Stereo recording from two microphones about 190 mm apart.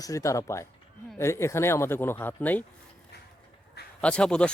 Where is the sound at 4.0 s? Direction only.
5° left (ahead or behind).